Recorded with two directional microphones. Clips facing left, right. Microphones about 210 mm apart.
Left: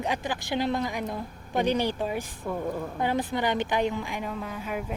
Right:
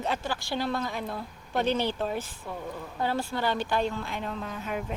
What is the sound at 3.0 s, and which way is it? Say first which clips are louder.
A woman's voice: left 1 dB; 15° left (ahead or behind).